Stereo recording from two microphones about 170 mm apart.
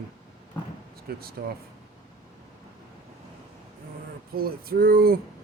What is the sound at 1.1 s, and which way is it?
Music, 65° right (ahead or behind).